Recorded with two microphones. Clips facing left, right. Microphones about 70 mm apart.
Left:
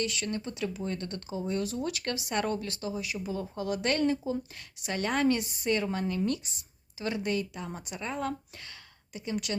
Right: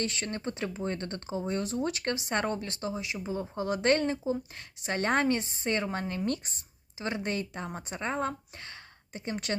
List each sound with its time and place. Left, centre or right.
0.0 s a woman's voice: right